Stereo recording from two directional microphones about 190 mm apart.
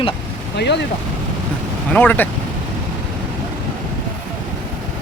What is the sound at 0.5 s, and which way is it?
Speech, 65° left (ahead or behind).